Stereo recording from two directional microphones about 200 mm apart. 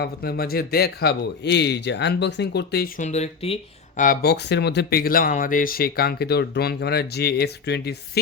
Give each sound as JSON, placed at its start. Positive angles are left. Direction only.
{"t": 0.0, "sound": "a man's voice", "side_deg": 50}
{"t": 3.0, "sound": "speech", "side_deg": 35}
{"t": 4.0, "sound": "speech", "side_deg": 45}